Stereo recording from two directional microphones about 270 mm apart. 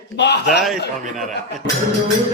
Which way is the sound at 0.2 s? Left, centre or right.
Left.